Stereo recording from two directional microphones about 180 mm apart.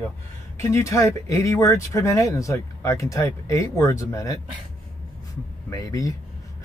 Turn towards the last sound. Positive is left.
turn(degrees=20)  # may be behind; listen again after turning